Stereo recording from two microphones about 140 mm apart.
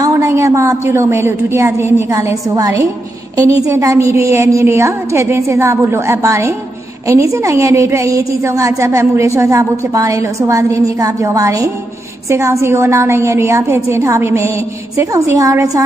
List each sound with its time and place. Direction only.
0.0 s a woman's voice: 20° right (ahead or behind)